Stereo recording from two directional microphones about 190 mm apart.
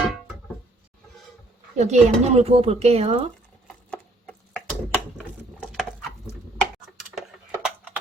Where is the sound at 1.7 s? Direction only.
35° right (ahead or behind).